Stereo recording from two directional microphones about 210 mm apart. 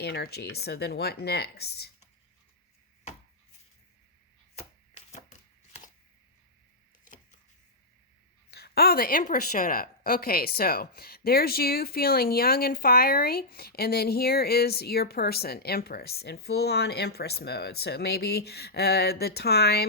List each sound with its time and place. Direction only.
0.0 s a woman's voice: 50° left (ahead or behind)
4.5 s chopping: 30° left (ahead or behind)
7.0 s a sound: 40° left (ahead or behind)
8.4 s a woman's voice: 50° left (ahead or behind)